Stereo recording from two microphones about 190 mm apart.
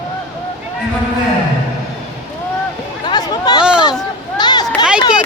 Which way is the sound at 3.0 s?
20° left (ahead or behind).